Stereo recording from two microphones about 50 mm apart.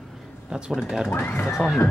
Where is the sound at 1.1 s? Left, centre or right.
Left.